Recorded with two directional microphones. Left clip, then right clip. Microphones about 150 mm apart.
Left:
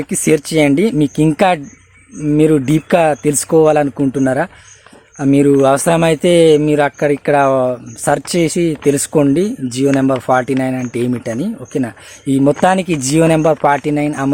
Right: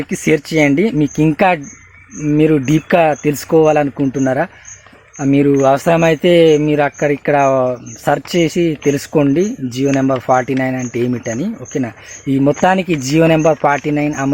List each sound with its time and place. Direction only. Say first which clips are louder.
0.1 s speech: left 1 dB; 15° left (ahead or behind)